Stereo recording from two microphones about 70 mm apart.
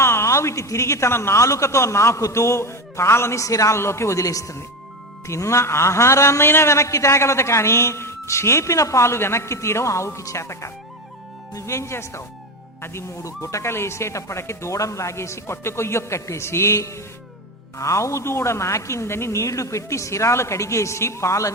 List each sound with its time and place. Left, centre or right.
0.0 s a man's voice: left
3.4 s a man's voice: left
3.8 s a man's voice: left